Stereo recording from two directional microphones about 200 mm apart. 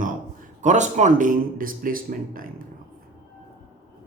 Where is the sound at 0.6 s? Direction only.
35° right (ahead or behind).